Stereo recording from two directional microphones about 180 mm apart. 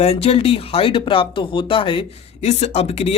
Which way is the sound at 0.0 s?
35° left (ahead or behind).